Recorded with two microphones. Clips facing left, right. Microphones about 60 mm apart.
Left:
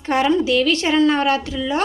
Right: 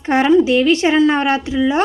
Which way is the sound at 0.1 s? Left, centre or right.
Right.